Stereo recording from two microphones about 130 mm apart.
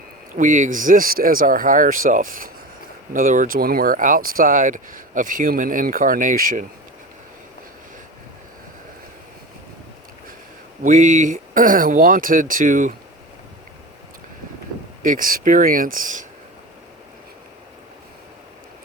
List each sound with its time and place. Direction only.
0.3 s speech: 75° right (ahead or behind)
10.8 s speech: 80° right
15.0 s speech: 90° right